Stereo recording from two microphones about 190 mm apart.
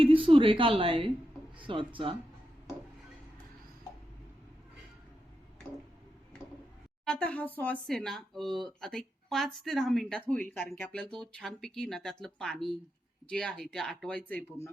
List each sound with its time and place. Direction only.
0.0 s a woman's voice: 30° right (ahead or behind)
7.0 s speech: 5° left (ahead or behind)